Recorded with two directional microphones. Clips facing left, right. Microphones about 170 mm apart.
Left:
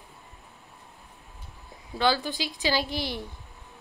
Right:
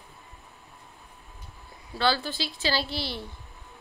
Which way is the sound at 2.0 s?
15° left (ahead or behind).